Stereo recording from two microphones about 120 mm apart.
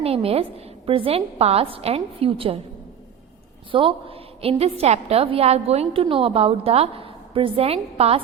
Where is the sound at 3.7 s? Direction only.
50° right (ahead or behind).